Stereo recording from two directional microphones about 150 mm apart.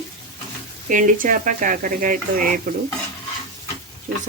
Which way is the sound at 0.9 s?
60° right (ahead or behind).